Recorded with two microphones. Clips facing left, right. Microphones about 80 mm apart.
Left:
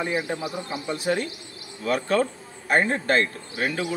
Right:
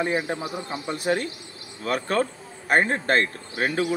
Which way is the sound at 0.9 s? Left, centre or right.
Right.